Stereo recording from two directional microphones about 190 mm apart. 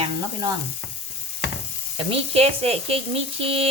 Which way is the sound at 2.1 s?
30° right (ahead or behind).